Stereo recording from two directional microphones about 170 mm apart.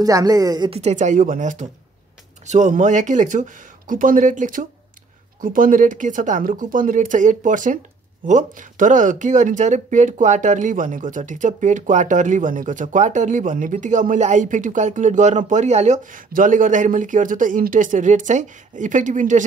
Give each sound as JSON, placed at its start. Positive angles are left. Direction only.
{"t": 0.0, "sound": "speech", "side_deg": -20}
{"t": 0.7, "sound": "speech", "side_deg": -40}